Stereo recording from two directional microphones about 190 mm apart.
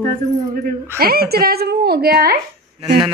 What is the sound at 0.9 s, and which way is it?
A woman's voice, 55° right (ahead or behind).